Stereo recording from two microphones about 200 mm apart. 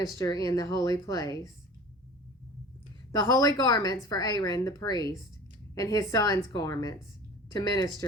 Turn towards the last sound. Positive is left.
turn(degrees=20)  # may be behind; listen again after turning